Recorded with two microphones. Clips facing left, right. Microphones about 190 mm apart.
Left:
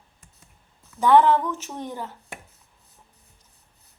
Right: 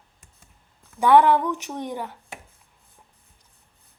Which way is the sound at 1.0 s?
10° right (ahead or behind).